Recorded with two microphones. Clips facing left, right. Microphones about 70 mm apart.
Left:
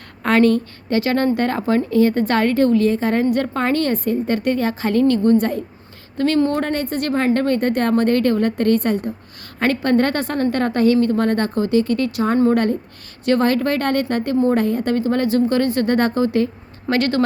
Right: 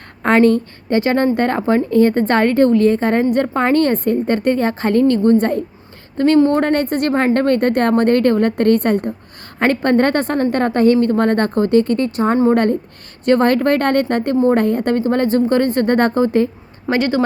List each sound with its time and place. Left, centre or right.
0.2 s a woman's voice: right
6.1 s a woman's voice: right
6.6 s a woman's voice: right
9.6 s a woman's voice: right
16.9 s a woman's voice: centre